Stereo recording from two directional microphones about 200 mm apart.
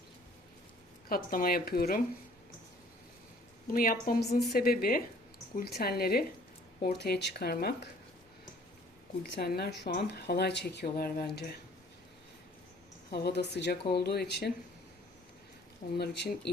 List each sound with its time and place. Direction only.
1.0 s speech: 45° left (ahead or behind)
3.7 s speech: 45° left (ahead or behind)
9.3 s speech: 50° left (ahead or behind)
13.1 s speech: 55° left (ahead or behind)
16.0 s speech: 55° left (ahead or behind)